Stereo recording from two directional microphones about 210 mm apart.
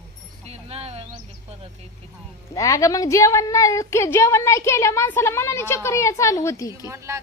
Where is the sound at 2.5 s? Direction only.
15° left (ahead or behind).